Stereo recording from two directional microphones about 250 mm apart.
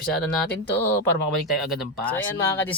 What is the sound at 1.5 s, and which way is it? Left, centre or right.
Speech, centre.